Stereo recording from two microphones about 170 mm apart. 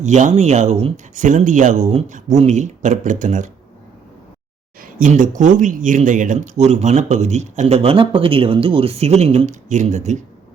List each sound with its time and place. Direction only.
0.0 s speech: 45° right (ahead or behind)
4.8 s speech: 50° right (ahead or behind)